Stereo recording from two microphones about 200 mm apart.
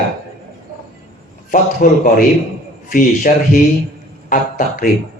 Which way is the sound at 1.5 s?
40° left (ahead or behind).